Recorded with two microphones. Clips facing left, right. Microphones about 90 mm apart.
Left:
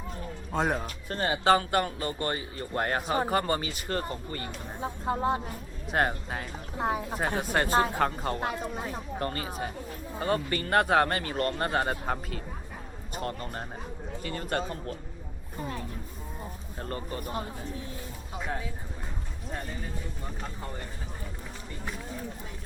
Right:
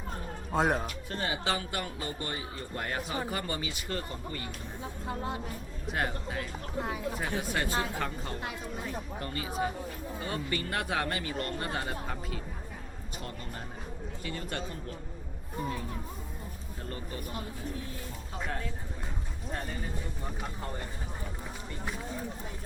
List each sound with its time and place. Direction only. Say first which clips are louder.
0.5 s speech: right 1 dB; centre (ahead or behind)
1.1 s a man's voice: left 9 dB; 45° left (ahead or behind)
16.9 s speech: left 5 dB; 45° left (ahead or behind)
18.4 s speech: left 2 dB; 15° left (ahead or behind)
20.2 s speech: even; centre (ahead or behind)